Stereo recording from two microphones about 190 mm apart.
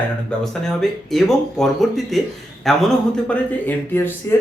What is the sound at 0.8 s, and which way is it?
Speech, centre (ahead or behind).